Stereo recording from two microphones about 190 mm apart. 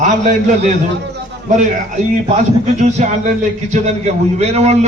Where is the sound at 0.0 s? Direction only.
40° right (ahead or behind).